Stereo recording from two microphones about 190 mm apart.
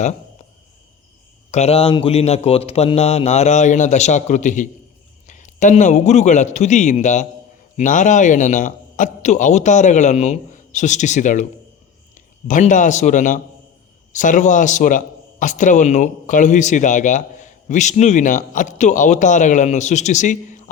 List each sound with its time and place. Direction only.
1.5 s a man's voice: 35° left (ahead or behind)